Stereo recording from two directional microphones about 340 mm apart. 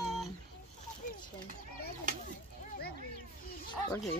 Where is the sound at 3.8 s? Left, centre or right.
Centre.